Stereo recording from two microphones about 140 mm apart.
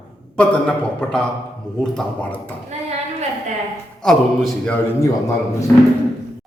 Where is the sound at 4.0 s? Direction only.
5° left (ahead or behind).